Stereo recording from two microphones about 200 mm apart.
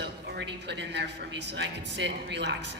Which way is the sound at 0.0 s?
60° right (ahead or behind).